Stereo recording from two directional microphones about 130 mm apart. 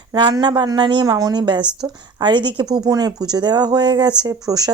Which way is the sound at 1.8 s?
20° right (ahead or behind).